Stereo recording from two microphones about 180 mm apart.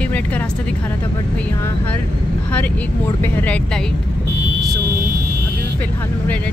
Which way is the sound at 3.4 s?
5° left (ahead or behind).